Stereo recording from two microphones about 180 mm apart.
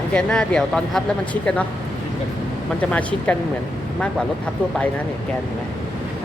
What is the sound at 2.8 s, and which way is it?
Speech, 5° left (ahead or behind).